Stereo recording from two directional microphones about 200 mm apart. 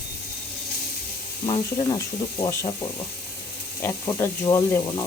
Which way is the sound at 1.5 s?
20° left (ahead or behind).